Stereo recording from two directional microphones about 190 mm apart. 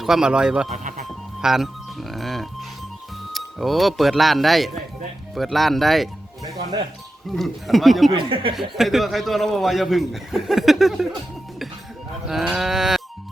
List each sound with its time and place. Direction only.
0.0 s speech: 5° right (ahead or behind)
0.7 s music: 40° right (ahead or behind)
1.0 s music: centre (ahead or behind)
3.3 s speech: centre (ahead or behind)
8.1 s speech: 25° right (ahead or behind)
8.7 s speech: centre (ahead or behind)
12.3 s speech: centre (ahead or behind)